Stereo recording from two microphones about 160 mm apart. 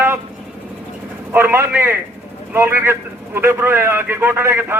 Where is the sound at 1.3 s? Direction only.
15° right (ahead or behind).